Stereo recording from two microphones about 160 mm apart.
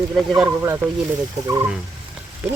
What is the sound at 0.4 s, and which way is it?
Turkey, 15° right (ahead or behind).